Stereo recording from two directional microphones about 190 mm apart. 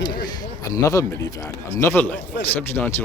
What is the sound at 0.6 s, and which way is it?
Speech, 15° left (ahead or behind).